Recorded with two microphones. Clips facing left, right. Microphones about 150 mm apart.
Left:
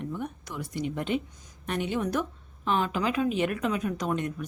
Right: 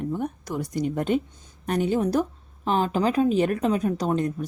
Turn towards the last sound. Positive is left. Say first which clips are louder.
# right 5 dB
turn(degrees=-35)  # may be behind; listen again after turning